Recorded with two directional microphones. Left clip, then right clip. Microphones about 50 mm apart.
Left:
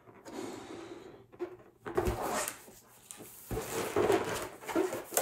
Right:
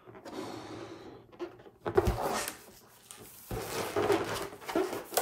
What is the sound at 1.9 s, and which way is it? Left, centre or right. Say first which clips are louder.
Cupboard open or close: right 4 dB; right.